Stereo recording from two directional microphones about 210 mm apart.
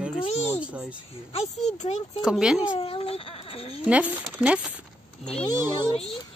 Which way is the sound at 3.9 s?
5° right (ahead or behind).